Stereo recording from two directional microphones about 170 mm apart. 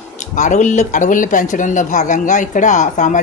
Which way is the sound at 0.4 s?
45° left (ahead or behind).